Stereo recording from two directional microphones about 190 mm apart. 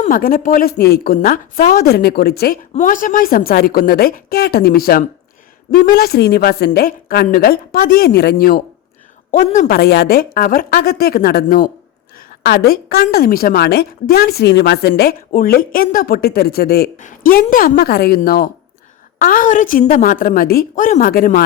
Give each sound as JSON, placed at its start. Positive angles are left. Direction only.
{"t": 0.0, "sound": "a woman's voice", "side_deg": 45}
{"t": 2.7, "sound": "a woman's voice", "side_deg": 45}
{"t": 9.3, "sound": "a woman's voice", "side_deg": 40}
{"t": 9.7, "sound": "a woman's voice", "side_deg": 60}